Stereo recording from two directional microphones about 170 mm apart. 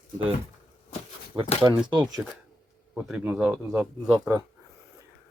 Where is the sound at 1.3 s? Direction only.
25° right (ahead or behind).